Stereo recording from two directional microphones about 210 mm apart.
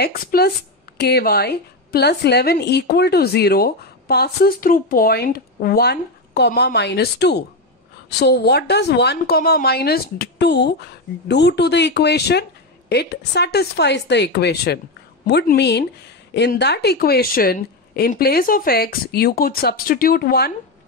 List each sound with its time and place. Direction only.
0.0 s a woman's voice: 45° left (ahead or behind)